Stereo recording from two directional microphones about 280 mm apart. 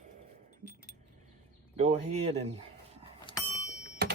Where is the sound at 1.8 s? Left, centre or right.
Right.